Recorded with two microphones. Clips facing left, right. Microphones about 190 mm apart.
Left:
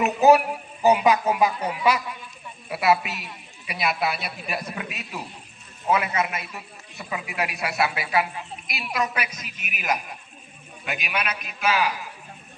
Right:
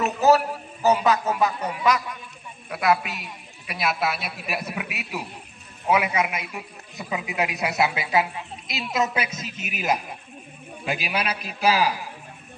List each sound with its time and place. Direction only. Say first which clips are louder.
0.0 s a man's voice: left 2 dB; 15° left (ahead or behind); by 11.9 s 35° right (ahead or behind)